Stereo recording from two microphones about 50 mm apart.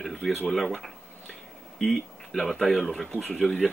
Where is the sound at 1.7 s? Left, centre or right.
Centre.